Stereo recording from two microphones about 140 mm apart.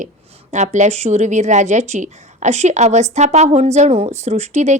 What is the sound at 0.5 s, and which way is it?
A woman's voice, 55° right (ahead or behind).